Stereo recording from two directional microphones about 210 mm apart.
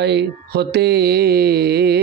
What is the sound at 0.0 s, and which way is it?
Mantra, 55° right (ahead or behind).